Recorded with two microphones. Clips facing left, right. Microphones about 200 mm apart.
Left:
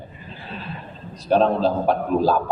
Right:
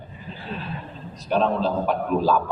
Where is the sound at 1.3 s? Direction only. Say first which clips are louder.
Left 4 dB; 35° left (ahead or behind).